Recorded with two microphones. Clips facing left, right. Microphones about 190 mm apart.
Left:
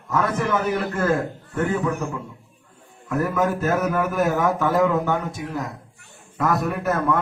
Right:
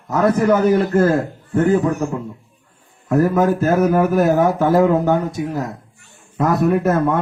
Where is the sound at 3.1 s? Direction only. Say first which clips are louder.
Right 7 dB; 35° right (ahead or behind).